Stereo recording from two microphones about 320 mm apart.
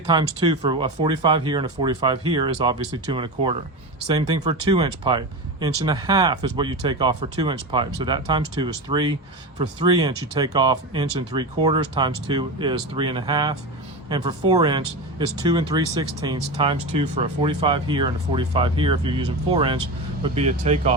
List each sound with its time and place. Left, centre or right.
0.1 s speech: centre